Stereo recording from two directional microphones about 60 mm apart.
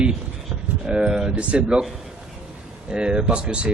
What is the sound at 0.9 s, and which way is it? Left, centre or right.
Speech, centre.